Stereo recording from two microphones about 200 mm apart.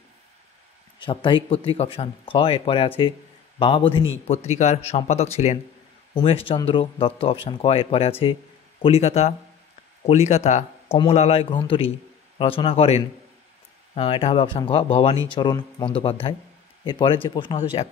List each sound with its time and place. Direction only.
0.9 s speech: 25° left (ahead or behind)